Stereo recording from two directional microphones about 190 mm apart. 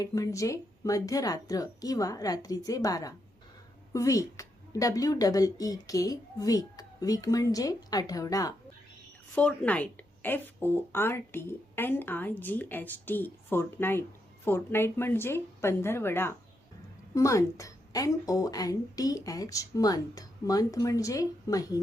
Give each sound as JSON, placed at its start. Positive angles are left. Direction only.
{"t": 0.0, "sound": "a woman's voice", "side_deg": 15}
{"t": 9.3, "sound": "a woman's voice", "side_deg": 5}